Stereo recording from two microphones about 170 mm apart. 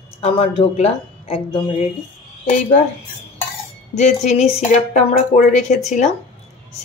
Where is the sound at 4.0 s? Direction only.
45° left (ahead or behind).